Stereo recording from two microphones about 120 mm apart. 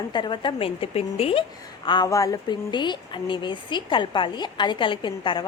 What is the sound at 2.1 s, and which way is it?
A woman's voice, 30° left (ahead or behind).